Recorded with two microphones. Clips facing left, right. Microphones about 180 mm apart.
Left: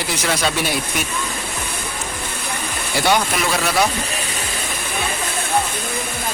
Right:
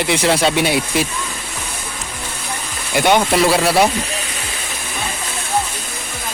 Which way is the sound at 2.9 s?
20° right (ahead or behind).